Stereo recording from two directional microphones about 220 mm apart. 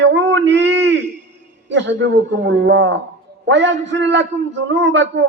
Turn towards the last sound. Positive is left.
turn(degrees=-55)  # may be behind; listen again after turning